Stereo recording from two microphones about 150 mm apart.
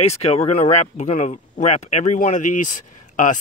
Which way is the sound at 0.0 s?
45° left (ahead or behind).